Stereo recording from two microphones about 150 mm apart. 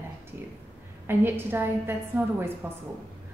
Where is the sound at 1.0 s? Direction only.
15° right (ahead or behind).